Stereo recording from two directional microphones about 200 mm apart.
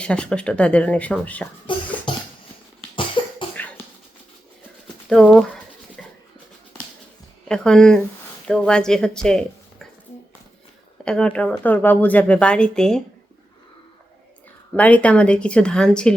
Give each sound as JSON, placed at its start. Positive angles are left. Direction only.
{"t": 0.0, "sound": "a woman's voice", "side_deg": 5}
{"t": 1.7, "sound": "a sound", "side_deg": 25}
{"t": 3.2, "sound": "cough", "side_deg": 25}
{"t": 5.0, "sound": "a sound", "side_deg": 0}
{"t": 7.4, "sound": "speech", "side_deg": 5}
{"t": 11.0, "sound": "a woman's voice", "side_deg": 5}
{"t": 14.8, "sound": "a woman's voice", "side_deg": 5}